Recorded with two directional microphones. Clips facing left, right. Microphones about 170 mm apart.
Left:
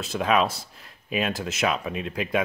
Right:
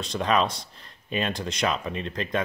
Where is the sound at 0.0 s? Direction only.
5° left (ahead or behind).